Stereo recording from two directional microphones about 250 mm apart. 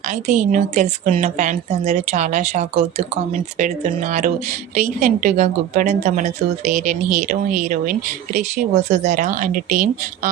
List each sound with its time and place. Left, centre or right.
0.1 s speech: right